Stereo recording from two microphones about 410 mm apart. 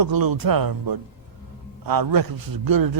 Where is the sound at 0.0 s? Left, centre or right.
Right.